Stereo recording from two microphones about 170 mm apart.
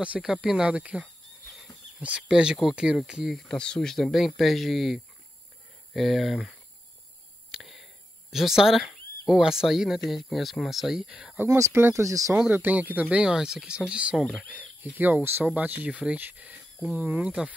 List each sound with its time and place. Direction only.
0.0 s speech: 5° right (ahead or behind)
7.5 s whispering: centre (ahead or behind)
9.3 s speech: 5° right (ahead or behind)
11.4 s speech: 20° right (ahead or behind)
14.2 s speech: 5° left (ahead or behind)
14.5 s speech: 10° right (ahead or behind)